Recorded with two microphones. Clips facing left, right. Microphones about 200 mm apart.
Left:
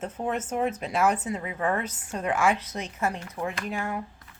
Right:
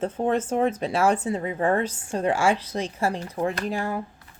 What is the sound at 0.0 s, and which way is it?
Speech, 30° right (ahead or behind).